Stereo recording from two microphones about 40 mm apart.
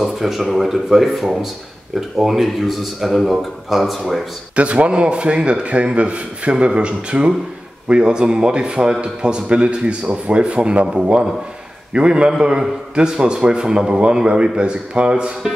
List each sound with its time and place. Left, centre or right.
0.0 s speech: centre
4.6 s a man's voice: right